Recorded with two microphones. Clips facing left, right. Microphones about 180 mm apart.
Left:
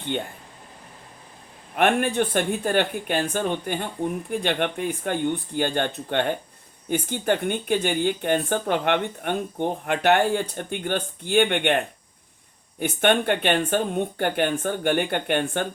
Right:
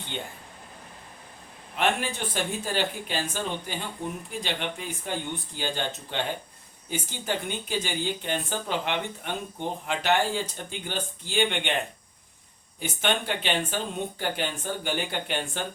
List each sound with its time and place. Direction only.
1.7 s speech: 55° left (ahead or behind)
12.8 s speech: 55° left (ahead or behind)